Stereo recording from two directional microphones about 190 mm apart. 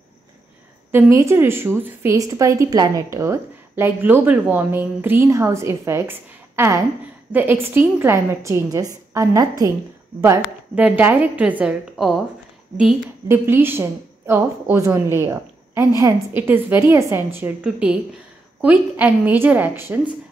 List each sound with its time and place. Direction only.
0.9 s a woman's voice: 15° right (ahead or behind)
13.3 s a woman's voice: 10° right (ahead or behind)